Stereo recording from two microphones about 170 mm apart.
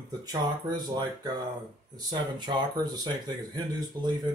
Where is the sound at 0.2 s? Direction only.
25° right (ahead or behind).